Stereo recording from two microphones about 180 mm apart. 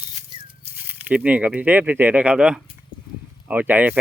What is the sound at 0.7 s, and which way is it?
Speech, 10° right (ahead or behind).